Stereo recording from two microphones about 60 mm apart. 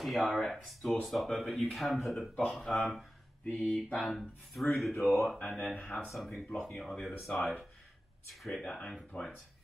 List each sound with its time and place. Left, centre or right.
0.0 s speech: centre
5.0 s speech: left
5.5 s speech: centre
8.6 s speech: centre